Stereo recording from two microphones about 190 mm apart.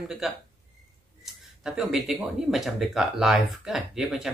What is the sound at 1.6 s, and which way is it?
Speech, centre (ahead or behind).